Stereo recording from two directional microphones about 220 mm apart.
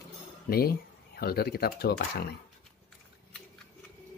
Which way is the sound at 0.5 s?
45° left (ahead or behind).